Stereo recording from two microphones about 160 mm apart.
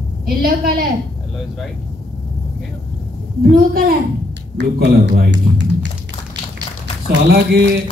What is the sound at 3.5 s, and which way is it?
Speech, 65° right (ahead or behind).